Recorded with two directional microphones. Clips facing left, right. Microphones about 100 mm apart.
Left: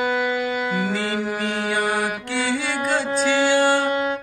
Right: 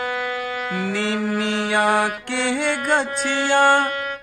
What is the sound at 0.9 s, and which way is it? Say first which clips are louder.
Music: right 1 dB; 85° right.